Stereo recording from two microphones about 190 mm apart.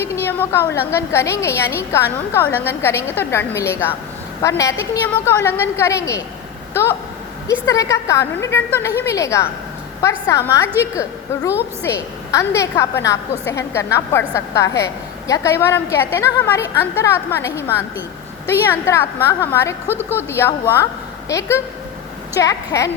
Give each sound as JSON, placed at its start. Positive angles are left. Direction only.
{"t": 0.0, "sound": "a woman's voice", "side_deg": 10}
{"t": 7.4, "sound": "a woman's voice", "side_deg": 15}
{"t": 11.8, "sound": "a woman's voice", "side_deg": 15}